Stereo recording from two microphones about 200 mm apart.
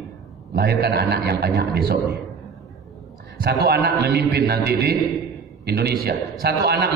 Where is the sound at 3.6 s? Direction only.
55° right (ahead or behind).